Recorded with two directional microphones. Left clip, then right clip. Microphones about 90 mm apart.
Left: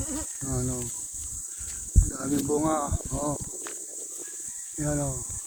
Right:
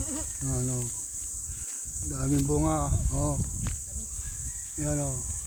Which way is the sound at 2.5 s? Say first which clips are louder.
Left 5 dB; 30° left (ahead or behind).